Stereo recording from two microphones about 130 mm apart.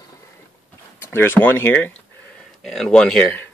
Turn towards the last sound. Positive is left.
turn(degrees=5)  # may be behind; listen again after turning